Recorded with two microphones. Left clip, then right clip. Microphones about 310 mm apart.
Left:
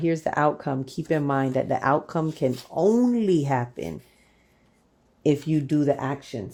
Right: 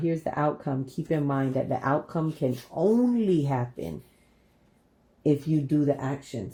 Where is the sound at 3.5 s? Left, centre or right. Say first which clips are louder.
Left 4 dB; left.